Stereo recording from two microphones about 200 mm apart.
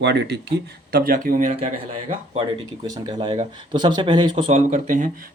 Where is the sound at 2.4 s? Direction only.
20° right (ahead or behind).